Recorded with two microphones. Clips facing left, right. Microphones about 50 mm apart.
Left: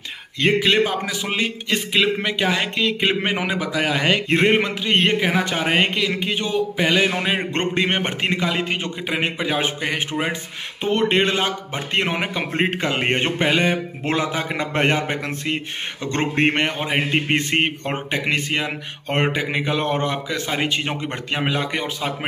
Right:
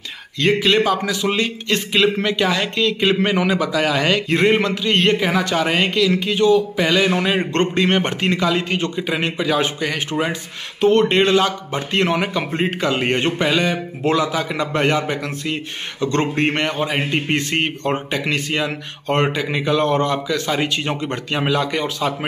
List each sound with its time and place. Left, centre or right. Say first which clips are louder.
0.4 s a man's voice: right 1 dB; centre
12.5 s a man's voice: right 1 dB; left